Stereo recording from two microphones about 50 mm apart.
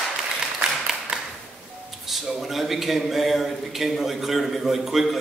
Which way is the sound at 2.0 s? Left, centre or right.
Centre.